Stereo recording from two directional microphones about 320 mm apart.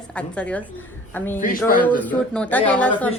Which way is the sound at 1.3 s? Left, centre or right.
Left.